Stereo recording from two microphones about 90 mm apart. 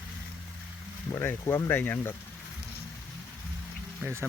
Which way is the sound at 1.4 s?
30° left (ahead or behind).